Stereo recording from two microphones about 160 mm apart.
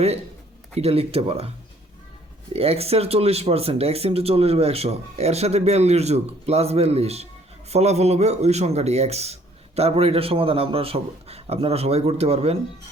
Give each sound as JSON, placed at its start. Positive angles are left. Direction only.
{"t": 0.8, "sound": "a man's voice", "side_deg": -40}
{"t": 2.5, "sound": "a man's voice", "side_deg": -40}